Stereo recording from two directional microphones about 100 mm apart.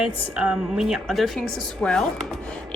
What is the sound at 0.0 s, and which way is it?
A woman's voice, 10° right (ahead or behind).